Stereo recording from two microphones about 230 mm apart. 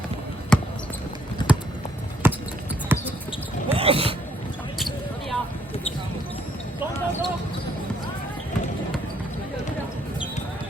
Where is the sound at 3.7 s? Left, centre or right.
Right.